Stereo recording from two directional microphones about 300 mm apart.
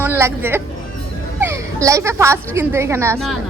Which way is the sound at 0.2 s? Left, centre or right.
Centre.